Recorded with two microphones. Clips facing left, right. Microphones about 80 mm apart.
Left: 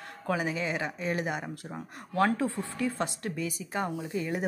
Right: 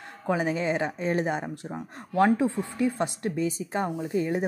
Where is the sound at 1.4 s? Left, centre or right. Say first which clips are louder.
Right 4 dB; centre.